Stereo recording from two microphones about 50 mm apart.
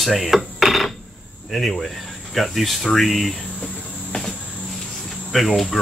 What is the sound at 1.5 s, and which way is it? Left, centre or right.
Speech, centre.